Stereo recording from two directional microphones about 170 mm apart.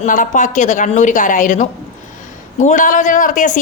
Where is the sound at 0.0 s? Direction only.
50° left (ahead or behind).